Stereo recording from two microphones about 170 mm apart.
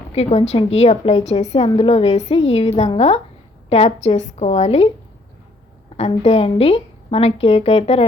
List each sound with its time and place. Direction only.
0.1 s a woman's voice: 35° left (ahead or behind)
6.0 s a woman's voice: 35° left (ahead or behind)